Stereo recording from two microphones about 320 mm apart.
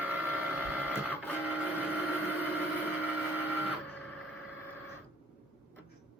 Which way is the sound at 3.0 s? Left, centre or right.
Centre.